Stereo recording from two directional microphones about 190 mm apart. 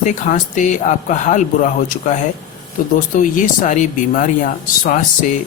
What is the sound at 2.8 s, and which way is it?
Speech, 45° left (ahead or behind).